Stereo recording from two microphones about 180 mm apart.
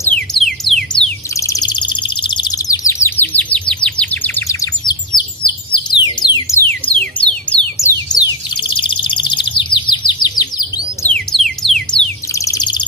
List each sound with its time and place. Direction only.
0.1 s music: centre (ahead or behind)
1.3 s bird: 15° left (ahead or behind)
6.6 s music: 5° left (ahead or behind)
8.1 s bird: 25° left (ahead or behind)
11.1 s music: 5° left (ahead or behind)
12.4 s bird: 20° left (ahead or behind)